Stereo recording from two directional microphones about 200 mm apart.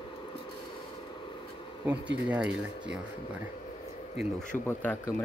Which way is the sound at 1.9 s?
5° right (ahead or behind).